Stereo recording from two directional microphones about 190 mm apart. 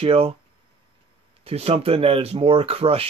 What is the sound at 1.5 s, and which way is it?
Speech, 30° right (ahead or behind).